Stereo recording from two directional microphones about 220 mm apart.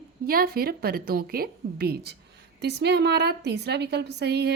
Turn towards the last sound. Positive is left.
turn(degrees=-50)  # may be behind; listen again after turning